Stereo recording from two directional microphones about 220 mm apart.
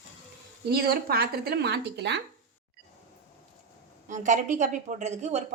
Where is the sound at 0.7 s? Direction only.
45° right (ahead or behind).